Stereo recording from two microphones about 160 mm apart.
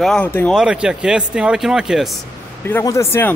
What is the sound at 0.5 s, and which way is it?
Speech, 5° right (ahead or behind).